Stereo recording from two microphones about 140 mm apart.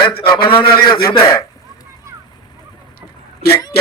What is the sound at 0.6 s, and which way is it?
Speech, 90° left.